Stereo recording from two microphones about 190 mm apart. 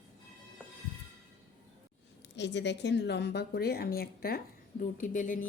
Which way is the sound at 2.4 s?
65° left (ahead or behind).